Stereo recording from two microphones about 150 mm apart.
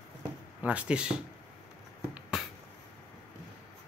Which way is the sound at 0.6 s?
10° right (ahead or behind).